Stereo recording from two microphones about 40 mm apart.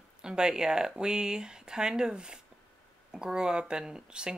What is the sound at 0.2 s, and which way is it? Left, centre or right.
Speech, centre.